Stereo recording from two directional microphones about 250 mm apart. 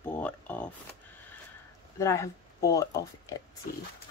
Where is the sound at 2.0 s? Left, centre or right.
Centre.